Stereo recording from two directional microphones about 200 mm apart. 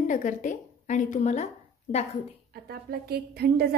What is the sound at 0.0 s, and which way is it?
Speech, 40° left (ahead or behind).